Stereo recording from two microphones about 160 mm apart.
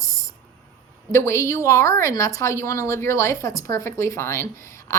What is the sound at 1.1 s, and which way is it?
A woman's voice, 15° left (ahead or behind).